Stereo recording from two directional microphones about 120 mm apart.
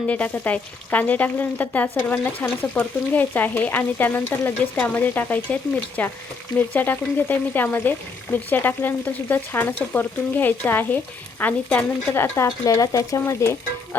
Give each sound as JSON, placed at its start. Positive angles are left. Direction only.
{"t": 0.1, "sound": "frying", "side_deg": 10}
{"t": 12.5, "sound": "speech", "side_deg": 30}